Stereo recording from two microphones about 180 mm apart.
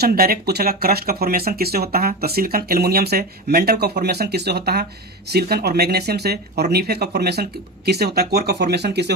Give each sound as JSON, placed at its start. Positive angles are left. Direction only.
{"t": 0.0, "sound": "speech", "side_deg": -60}